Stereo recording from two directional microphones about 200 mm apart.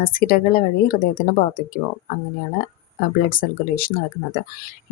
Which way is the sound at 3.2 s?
45° left (ahead or behind).